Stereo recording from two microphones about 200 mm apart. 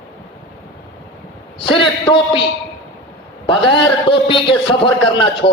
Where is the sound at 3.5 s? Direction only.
25° left (ahead or behind).